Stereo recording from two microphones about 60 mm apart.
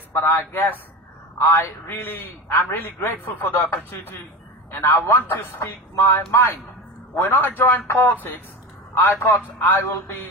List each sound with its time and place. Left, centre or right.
0.1 s a man's voice: left
3.9 s a man's voice: left